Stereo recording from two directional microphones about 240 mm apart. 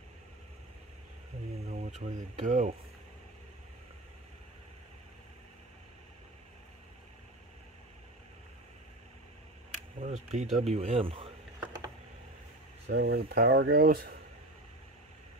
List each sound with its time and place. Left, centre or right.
1.7 s speech: right
9.9 s speech: right
12.8 s speech: right